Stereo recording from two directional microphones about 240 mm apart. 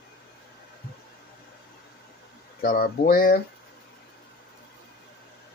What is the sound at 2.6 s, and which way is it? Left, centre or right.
Speech, left.